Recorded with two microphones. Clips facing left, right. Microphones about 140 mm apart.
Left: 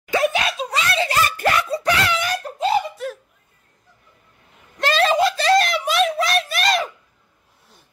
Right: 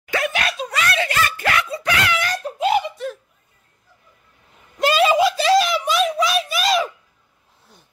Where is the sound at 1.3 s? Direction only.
40° left (ahead or behind).